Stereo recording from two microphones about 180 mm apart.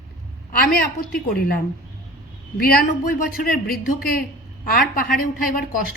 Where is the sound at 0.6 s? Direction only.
55° left (ahead or behind).